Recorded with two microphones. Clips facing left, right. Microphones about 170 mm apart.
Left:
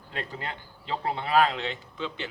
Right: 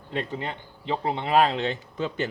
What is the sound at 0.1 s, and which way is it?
Speech, 25° right (ahead or behind).